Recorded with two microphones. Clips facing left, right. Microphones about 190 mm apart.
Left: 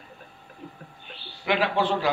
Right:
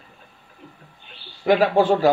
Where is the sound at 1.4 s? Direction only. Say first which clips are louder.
Right 8 dB; 40° right (ahead or behind).